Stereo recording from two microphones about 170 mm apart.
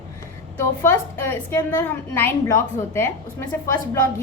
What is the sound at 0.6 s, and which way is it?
A woman's voice, 15° left (ahead or behind).